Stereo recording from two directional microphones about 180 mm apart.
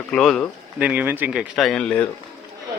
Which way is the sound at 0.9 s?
10° right (ahead or behind).